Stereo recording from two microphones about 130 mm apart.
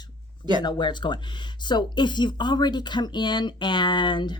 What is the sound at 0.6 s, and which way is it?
Speech, 35° left (ahead or behind).